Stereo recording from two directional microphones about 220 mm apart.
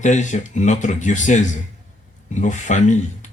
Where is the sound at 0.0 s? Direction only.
35° left (ahead or behind).